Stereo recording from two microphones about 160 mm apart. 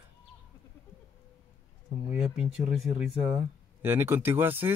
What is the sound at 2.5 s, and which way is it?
Speech, 5° right (ahead or behind).